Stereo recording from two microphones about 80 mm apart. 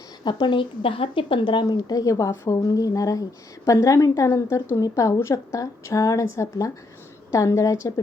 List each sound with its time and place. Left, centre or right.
0.3 s speech: left
1.9 s a woman's voice: left